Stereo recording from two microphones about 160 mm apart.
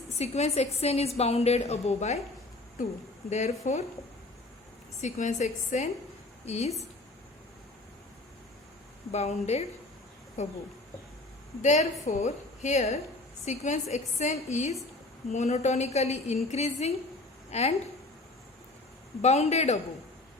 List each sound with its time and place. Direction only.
0.2 s a woman's voice: 45° left (ahead or behind)
3.2 s a woman's voice: 45° left (ahead or behind)
4.9 s a woman's voice: 50° left (ahead or behind)
9.1 s a woman's voice: 45° left (ahead or behind)
11.6 s a woman's voice: 50° left (ahead or behind)
19.2 s a woman's voice: 45° left (ahead or behind)